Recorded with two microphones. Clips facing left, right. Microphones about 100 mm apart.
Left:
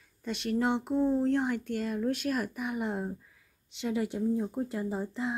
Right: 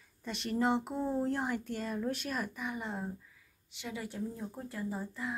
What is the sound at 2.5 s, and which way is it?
Speech, 15° left (ahead or behind).